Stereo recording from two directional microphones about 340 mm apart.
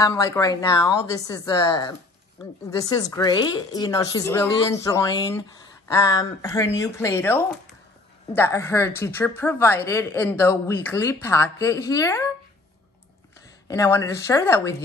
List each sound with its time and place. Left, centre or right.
0.0 s a woman's voice: centre
13.7 s a woman's voice: centre